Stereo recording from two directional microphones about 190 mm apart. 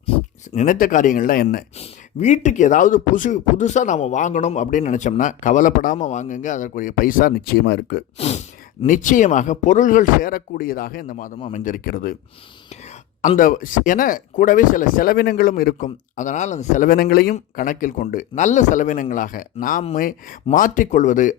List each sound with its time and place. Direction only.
0.5 s speech: 45° left (ahead or behind)
1.8 s speech: 35° left (ahead or behind); by 8.0 s 60° left (ahead or behind)
8.9 s speech: 45° left (ahead or behind)
13.2 s speech: 45° left (ahead or behind)